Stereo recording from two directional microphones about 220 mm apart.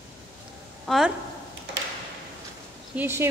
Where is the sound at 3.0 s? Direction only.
10° right (ahead or behind).